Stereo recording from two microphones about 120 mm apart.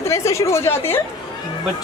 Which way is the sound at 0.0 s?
25° left (ahead or behind).